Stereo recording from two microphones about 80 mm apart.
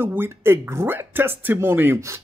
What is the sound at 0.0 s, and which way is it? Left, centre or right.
Speech, right.